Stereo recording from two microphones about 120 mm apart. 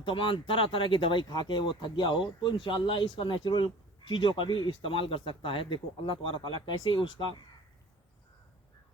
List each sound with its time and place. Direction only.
0.0 s speech: 45° left (ahead or behind)